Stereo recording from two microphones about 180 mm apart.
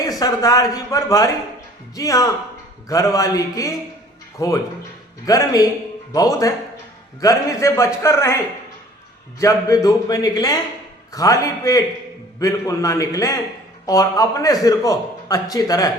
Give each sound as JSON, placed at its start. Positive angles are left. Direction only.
{"t": 0.2, "sound": "a man's voice", "side_deg": 20}
{"t": 9.4, "sound": "a man's voice", "side_deg": 20}